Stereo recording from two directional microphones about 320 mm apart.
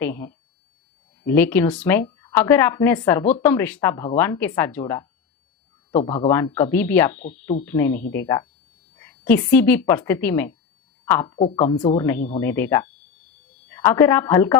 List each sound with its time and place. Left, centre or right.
0.0 s a woman's voice: centre
5.9 s speech: centre
6.2 s a woman's voice: centre
11.3 s a woman's voice: centre